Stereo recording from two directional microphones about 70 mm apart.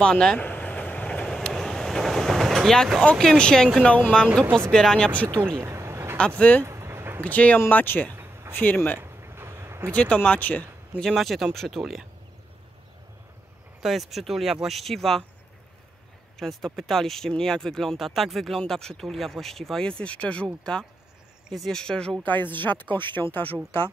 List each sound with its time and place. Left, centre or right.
0.0 s speech: centre
0.5 s vehicle: centre
3.2 s speech: centre
5.4 s a sound: right
6.1 s speech: centre
6.6 s a sound: right
7.2 s speech: left
9.0 s a sound: right
9.9 s speech: centre
11.0 s speech: centre
13.8 s speech: centre
16.3 s speech: centre
22.2 s speech: left